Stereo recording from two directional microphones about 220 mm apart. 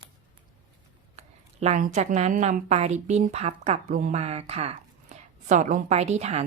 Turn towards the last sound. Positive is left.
turn(degrees=-30)  # may be behind; listen again after turning